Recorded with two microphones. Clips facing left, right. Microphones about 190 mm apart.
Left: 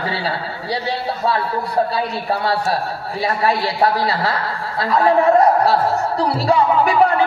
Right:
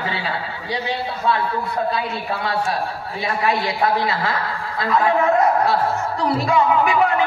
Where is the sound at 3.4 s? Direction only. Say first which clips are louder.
Left 2 dB; 35° left (ahead or behind).